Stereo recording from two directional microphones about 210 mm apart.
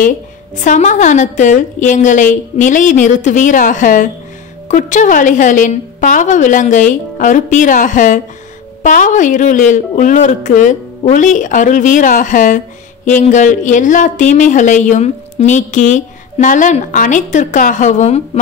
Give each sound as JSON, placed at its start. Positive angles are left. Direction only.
{"t": 0.6, "sound": "speech", "side_deg": 35}